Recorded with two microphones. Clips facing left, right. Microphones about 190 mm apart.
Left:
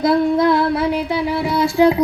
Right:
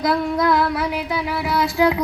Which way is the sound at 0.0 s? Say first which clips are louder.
Left 5 dB; 25° left (ahead or behind).